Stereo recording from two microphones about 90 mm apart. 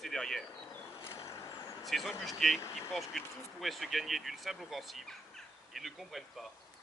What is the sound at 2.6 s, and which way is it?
Speech, 30° left (ahead or behind).